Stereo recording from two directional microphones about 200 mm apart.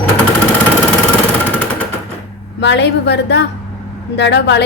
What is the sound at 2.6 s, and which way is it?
A woman's voice, 60° left (ahead or behind).